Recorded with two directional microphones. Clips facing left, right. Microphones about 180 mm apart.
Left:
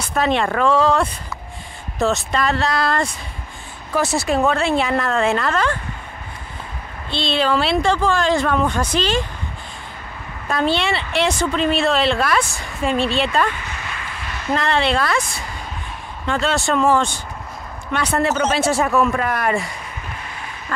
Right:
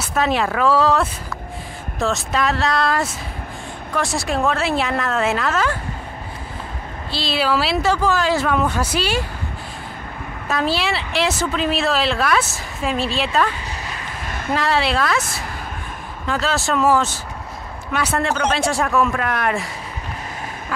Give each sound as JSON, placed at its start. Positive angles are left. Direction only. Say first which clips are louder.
{"t": 0.0, "sound": "speech", "louder": "left 1 dB", "side_deg": -5}
{"t": 7.1, "sound": "speech", "louder": "left 1 dB", "side_deg": -5}
{"t": 10.5, "sound": "speech", "louder": "left 2 dB", "side_deg": -5}
{"t": 13.6, "sound": "a sound", "louder": "right 1 dB", "side_deg": -35}
{"t": 14.5, "sound": "speech", "louder": "left 1 dB", "side_deg": -5}